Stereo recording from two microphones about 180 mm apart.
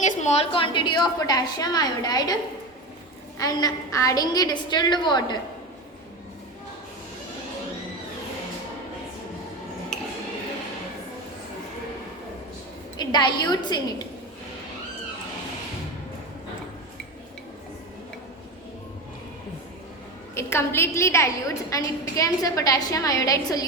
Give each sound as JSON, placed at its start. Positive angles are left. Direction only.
{"t": 0.0, "sound": "a woman's voice", "side_deg": 40}
{"t": 9.9, "sound": "a sound", "side_deg": 5}
{"t": 13.0, "sound": "a woman's voice", "side_deg": 25}
{"t": 20.3, "sound": "a woman's voice", "side_deg": 15}